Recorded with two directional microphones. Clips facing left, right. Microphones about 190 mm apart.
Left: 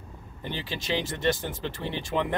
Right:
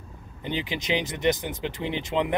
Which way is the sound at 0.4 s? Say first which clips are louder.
Right 4 dB; 20° right (ahead or behind).